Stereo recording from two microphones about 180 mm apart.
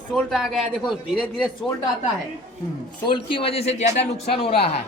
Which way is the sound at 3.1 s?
30° left (ahead or behind).